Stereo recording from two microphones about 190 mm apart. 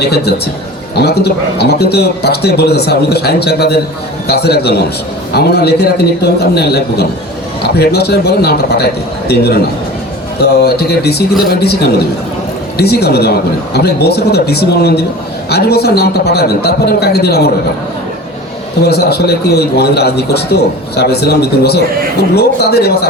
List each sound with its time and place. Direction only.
0.0 s a man's voice: 60° left (ahead or behind)
10.6 s a man's voice: 55° left (ahead or behind)
18.9 s a man's voice: 55° left (ahead or behind)